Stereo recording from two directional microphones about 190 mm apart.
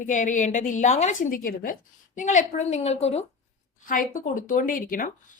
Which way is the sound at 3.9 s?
45° left (ahead or behind).